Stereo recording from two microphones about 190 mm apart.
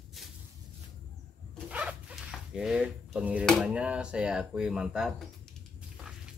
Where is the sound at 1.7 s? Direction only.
5° right (ahead or behind).